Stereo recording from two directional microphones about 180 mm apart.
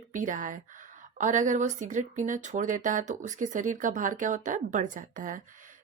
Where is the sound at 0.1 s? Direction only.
45° right (ahead or behind).